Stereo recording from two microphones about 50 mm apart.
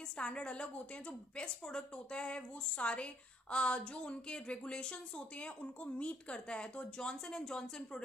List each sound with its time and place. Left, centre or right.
0.2 s speech: centre